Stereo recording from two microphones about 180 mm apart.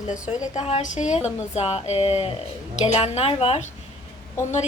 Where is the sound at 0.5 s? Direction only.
40° left (ahead or behind).